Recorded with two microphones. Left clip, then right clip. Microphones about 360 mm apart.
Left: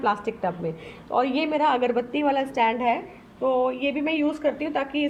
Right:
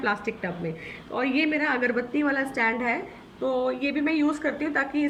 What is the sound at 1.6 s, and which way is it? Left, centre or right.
A woman's voice, centre.